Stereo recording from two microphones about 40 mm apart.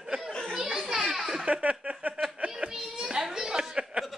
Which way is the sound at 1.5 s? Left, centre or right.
Right.